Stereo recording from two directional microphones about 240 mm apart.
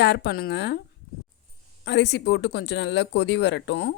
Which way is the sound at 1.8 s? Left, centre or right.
Left.